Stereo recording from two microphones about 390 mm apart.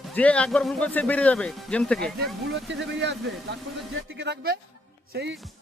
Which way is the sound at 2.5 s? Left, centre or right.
Right.